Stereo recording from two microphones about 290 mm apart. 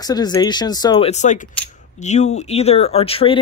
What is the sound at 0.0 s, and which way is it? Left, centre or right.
Speech, centre.